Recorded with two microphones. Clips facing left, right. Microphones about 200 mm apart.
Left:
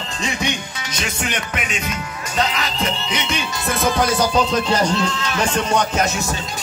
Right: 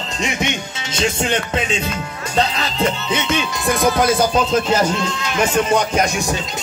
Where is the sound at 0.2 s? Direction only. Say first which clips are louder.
Right 2 dB; 20° right (ahead or behind).